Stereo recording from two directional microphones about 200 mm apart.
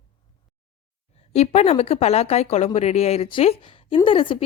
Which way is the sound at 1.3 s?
30° left (ahead or behind).